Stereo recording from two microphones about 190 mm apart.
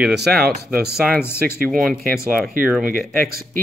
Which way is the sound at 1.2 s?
10° left (ahead or behind).